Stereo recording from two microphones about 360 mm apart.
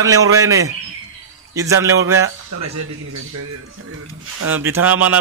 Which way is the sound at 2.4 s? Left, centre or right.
Right.